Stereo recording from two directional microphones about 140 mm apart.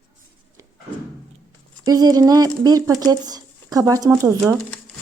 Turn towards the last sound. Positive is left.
turn(degrees=-20)  # may be behind; listen again after turning